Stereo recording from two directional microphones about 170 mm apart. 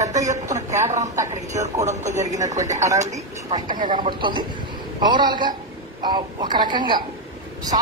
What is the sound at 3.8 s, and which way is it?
Speech, 45° right (ahead or behind).